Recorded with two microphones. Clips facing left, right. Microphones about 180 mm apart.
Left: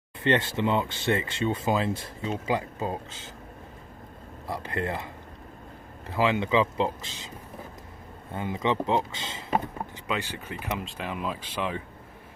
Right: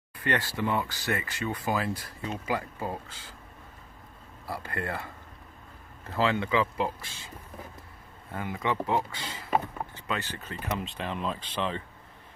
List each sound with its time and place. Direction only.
0.2 s speech: 20° left (ahead or behind)
4.5 s speech: 20° left (ahead or behind)
6.1 s speech: 15° left (ahead or behind)
8.4 s speech: 20° left (ahead or behind)
10.8 s speech: 5° left (ahead or behind)